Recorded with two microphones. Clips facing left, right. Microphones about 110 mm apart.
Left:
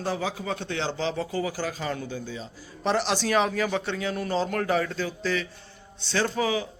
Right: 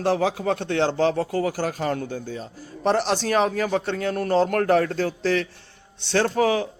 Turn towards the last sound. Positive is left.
turn(degrees=-60)  # may be behind; listen again after turning